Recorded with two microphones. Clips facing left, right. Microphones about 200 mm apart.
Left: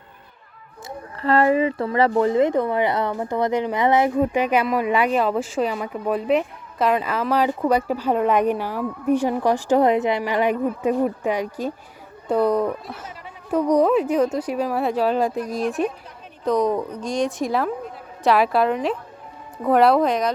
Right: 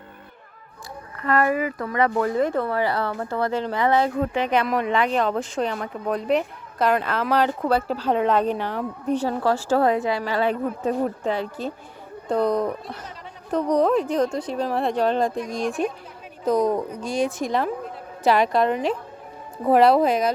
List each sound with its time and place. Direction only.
0.9 s speech: 30° left (ahead or behind)
4.4 s a woman's voice: 10° left (ahead or behind)